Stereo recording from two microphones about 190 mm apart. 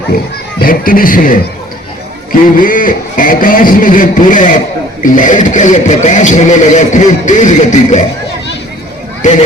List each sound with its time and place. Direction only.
0.6 s speech: 50° left (ahead or behind)
2.6 s a man's voice: 45° left (ahead or behind)
9.2 s a man's voice: 40° left (ahead or behind)